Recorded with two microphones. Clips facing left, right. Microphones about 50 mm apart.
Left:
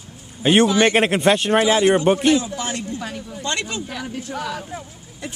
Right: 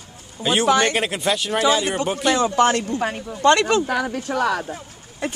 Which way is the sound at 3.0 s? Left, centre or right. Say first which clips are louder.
Right 6 dB; right.